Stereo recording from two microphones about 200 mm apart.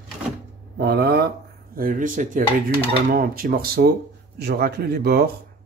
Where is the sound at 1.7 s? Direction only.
45° right (ahead or behind).